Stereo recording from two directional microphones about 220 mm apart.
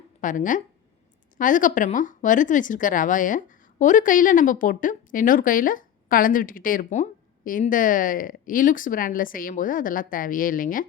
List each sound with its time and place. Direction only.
0.2 s speech: 35° left (ahead or behind)